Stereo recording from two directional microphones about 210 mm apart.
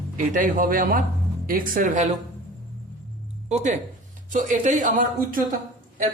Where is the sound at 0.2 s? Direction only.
40° right (ahead or behind).